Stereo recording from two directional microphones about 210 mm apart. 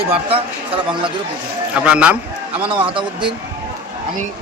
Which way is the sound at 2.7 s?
25° right (ahead or behind).